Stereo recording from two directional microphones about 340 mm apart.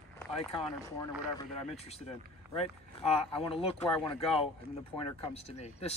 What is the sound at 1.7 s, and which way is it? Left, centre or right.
Speech, centre.